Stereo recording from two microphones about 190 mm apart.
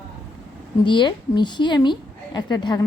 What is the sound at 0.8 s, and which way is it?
A woman's voice, 25° left (ahead or behind).